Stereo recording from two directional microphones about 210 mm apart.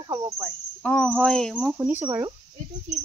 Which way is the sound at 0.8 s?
5° left (ahead or behind).